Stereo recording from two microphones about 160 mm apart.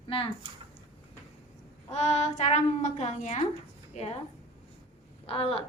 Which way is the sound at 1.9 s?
45° left (ahead or behind).